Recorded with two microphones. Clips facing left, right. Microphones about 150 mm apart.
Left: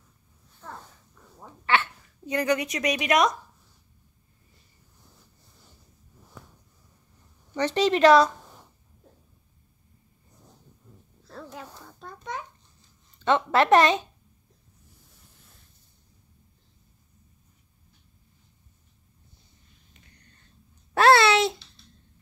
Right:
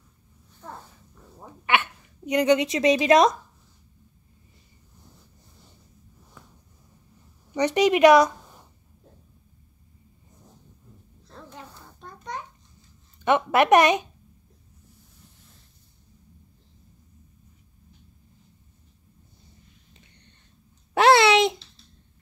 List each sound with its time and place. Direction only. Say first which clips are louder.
1.4 s a sound: right 1 dB; 15° right (ahead or behind)
7.5 s speech: right 3 dB; 15° right (ahead or behind)
13.2 s speech: right 2 dB; 15° right (ahead or behind)
20.9 s speech: right 1 dB; 20° right (ahead or behind)